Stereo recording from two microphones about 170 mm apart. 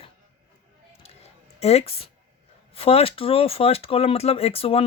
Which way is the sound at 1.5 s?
40° left (ahead or behind).